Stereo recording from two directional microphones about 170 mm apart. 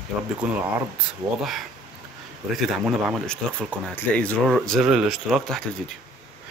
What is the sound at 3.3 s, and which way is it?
Speech, 5° left (ahead or behind).